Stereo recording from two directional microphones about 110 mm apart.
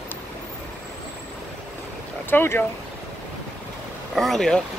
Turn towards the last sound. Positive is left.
turn(degrees=5)  # may be behind; listen again after turning